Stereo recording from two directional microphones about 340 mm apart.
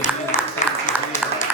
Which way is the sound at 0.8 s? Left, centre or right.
Left.